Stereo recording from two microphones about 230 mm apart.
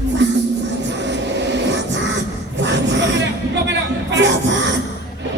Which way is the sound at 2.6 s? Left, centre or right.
Right.